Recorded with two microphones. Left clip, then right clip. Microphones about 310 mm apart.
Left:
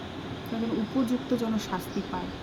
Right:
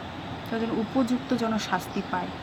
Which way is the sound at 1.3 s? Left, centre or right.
Centre.